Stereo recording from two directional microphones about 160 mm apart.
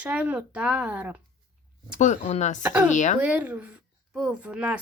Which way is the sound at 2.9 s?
50° left (ahead or behind).